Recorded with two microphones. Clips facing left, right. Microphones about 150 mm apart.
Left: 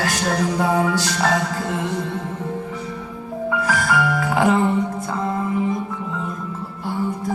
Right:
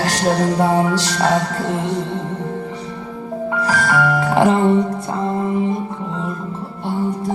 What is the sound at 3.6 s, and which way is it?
Music, 35° right (ahead or behind).